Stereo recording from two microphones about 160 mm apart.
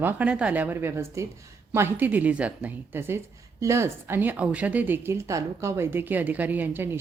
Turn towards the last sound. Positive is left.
turn(degrees=-15)  # may be behind; listen again after turning